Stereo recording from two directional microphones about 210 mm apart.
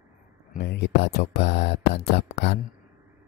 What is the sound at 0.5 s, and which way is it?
Speech, 50° left (ahead or behind).